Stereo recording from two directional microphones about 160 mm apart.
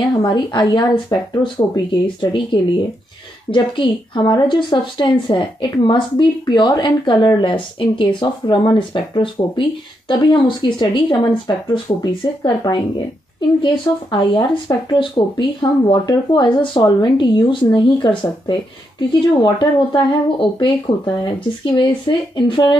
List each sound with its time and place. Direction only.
0.1 s speech: 25° left (ahead or behind)
14.1 s speech: 30° left (ahead or behind)